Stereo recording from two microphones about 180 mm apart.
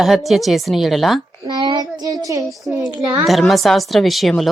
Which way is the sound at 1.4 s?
25° right (ahead or behind).